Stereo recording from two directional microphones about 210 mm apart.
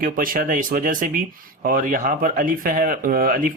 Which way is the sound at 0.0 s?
40° right (ahead or behind).